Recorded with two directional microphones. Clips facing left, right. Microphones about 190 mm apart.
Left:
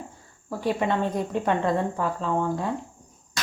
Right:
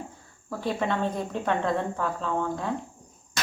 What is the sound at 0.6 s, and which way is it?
Speech, 15° left (ahead or behind).